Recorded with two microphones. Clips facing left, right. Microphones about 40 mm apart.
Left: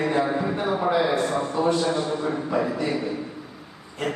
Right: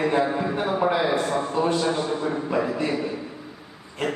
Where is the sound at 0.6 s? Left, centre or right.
Centre.